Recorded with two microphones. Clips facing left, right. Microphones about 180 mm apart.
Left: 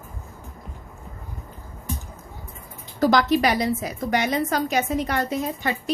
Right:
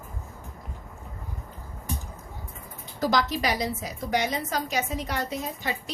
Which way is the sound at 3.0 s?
60° left (ahead or behind).